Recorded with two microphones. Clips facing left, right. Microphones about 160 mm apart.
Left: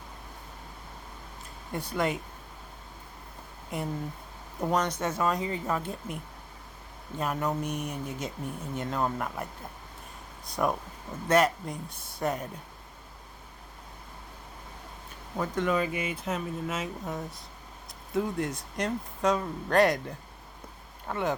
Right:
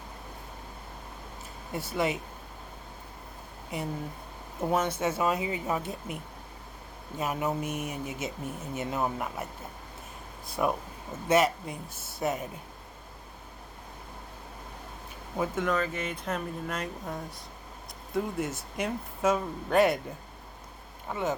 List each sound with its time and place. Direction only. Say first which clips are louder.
1.7 s speech: even; 5° right (ahead or behind)
3.7 s speech: left 1 dB; centre (ahead or behind)
7.2 s speech: even; 5° right (ahead or behind)
15.4 s speech: even; 5° right (ahead or behind)
15.7 s speech: left 1 dB; 10° left (ahead or behind)